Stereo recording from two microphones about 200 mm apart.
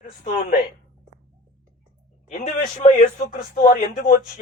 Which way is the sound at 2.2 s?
40° left (ahead or behind).